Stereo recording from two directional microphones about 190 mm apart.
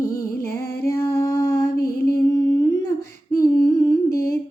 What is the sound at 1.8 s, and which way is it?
Music, 50° left (ahead or behind).